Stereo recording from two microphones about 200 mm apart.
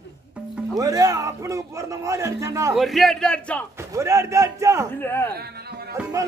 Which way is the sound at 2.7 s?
Centre (ahead or behind).